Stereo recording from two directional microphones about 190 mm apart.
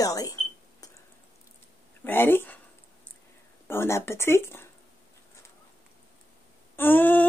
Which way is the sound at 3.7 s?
15° left (ahead or behind).